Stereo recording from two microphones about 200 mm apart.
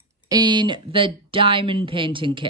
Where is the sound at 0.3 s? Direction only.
20° right (ahead or behind).